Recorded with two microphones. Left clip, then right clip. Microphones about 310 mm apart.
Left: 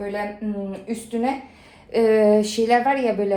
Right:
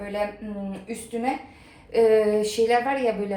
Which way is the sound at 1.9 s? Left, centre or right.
Left.